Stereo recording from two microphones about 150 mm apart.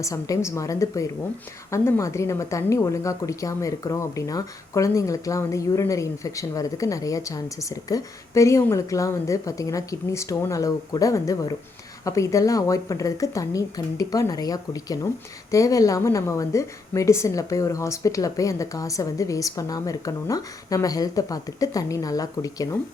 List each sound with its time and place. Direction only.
0.0 s speech: 20° left (ahead or behind)